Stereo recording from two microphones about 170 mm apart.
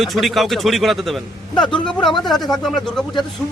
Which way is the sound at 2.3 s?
Centre (ahead or behind).